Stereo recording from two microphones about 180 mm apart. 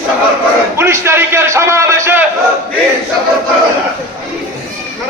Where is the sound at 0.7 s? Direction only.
15° right (ahead or behind).